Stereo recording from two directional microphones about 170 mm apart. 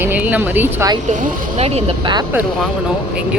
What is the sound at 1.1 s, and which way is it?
Speech, 45° right (ahead or behind).